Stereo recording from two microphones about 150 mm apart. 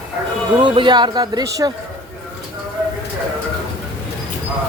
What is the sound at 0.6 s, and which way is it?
Speech, 35° right (ahead or behind).